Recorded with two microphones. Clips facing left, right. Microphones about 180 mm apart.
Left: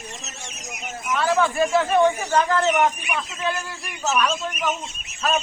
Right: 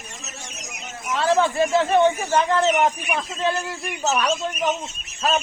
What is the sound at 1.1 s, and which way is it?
Speech, 25° right (ahead or behind).